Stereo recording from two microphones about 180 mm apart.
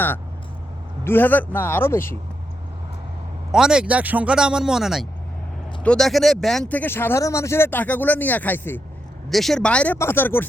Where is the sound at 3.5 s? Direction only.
5° right (ahead or behind).